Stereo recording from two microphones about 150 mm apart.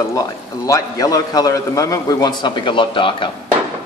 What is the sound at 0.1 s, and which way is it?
A man's voice, 20° left (ahead or behind).